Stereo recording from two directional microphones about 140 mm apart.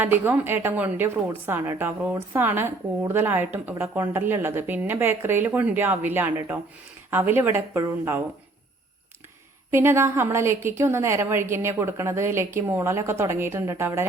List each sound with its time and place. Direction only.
0.0 s a woman's voice: 15° right (ahead or behind)
9.7 s a woman's voice: 20° right (ahead or behind)